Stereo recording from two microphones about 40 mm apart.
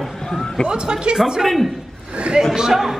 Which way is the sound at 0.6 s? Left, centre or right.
Right.